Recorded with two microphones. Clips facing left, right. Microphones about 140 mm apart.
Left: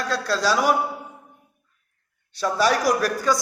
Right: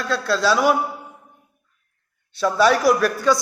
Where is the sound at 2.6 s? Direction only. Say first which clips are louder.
Right 4 dB; 40° left (ahead or behind).